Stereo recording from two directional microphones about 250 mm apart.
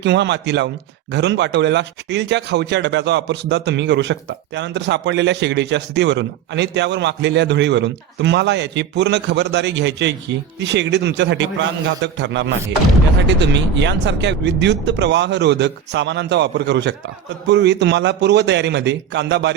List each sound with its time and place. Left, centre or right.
0.0 s speech: right